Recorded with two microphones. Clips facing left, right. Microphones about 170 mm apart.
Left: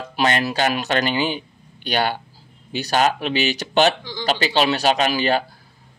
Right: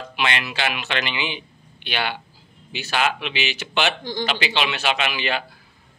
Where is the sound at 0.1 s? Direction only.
40° left (ahead or behind).